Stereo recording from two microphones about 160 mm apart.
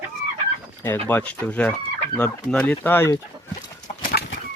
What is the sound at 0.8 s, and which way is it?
Speech, 10° left (ahead or behind).